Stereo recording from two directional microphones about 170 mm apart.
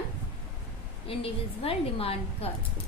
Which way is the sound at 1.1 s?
35° left (ahead or behind).